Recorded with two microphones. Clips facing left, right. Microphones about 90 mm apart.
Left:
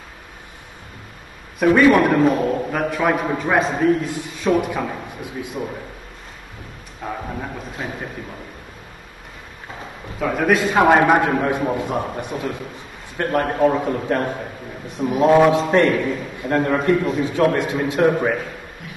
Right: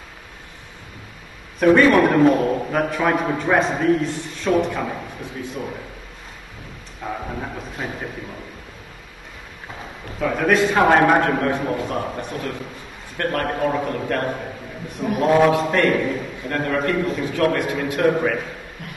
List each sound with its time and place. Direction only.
1.6 s a man's voice: 5° left (ahead or behind)
7.8 s a man's voice: centre (ahead or behind)
10.1 s a man's voice: 5° left (ahead or behind); by 18.3 s 20° left (ahead or behind)